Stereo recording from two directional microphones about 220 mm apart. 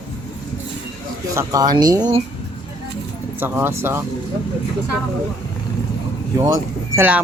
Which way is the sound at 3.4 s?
10° right (ahead or behind).